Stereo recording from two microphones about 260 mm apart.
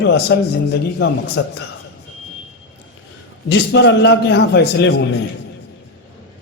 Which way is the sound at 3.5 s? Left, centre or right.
Left.